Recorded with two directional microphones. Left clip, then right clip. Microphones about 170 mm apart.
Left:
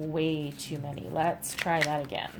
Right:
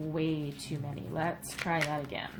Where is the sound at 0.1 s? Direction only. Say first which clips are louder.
Left 3 dB; 45° left (ahead or behind).